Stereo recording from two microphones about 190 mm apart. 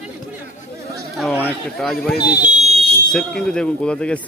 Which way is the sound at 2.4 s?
35° right (ahead or behind).